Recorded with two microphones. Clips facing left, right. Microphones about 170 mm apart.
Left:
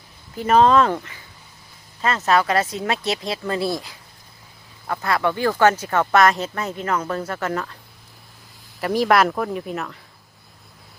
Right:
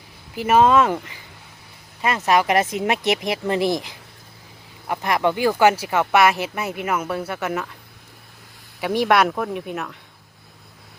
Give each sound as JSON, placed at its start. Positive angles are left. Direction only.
{"t": 0.3, "sound": "speech", "side_deg": -10}
{"t": 8.8, "sound": "speech", "side_deg": 0}